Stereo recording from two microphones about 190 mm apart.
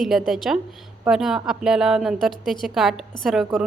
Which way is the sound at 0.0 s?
Centre (ahead or behind).